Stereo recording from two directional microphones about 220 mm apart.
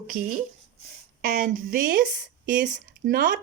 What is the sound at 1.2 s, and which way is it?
Speech, 40° right (ahead or behind).